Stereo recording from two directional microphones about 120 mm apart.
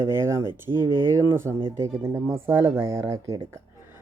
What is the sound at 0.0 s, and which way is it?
Speech, 20° right (ahead or behind).